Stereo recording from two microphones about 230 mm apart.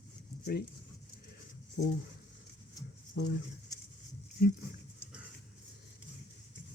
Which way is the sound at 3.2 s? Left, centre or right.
Left.